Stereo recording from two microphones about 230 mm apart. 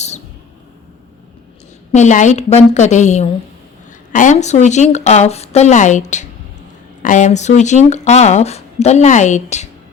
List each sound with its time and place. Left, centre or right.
1.9 s speech: left